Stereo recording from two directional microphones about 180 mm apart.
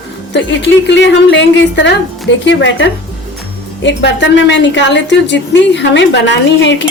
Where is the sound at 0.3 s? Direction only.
85° left.